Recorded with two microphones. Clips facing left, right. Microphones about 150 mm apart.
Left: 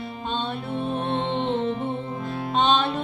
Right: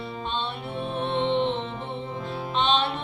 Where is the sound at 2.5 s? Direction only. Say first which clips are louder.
Left 3 dB; 45° left (ahead or behind).